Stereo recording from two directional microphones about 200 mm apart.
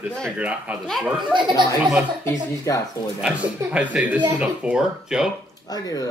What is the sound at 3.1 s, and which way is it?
A man's voice, 5° right (ahead or behind).